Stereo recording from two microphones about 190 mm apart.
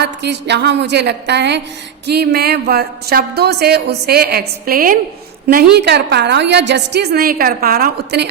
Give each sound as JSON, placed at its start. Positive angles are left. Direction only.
{"t": 0.0, "sound": "a woman's voice", "side_deg": -65}